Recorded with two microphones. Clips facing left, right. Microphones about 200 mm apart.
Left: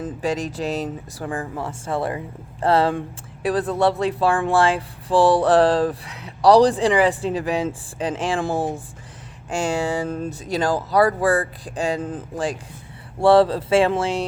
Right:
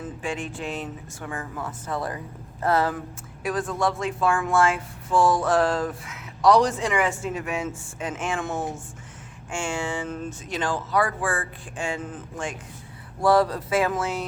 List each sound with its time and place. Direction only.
0.0 s speech: 35° left (ahead or behind)